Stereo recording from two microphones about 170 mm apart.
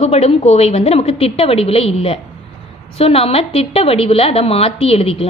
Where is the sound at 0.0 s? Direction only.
35° left (ahead or behind).